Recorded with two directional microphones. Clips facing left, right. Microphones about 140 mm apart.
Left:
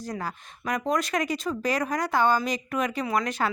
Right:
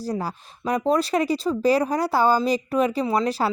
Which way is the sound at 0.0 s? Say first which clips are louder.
Right 5 dB; 35° right (ahead or behind).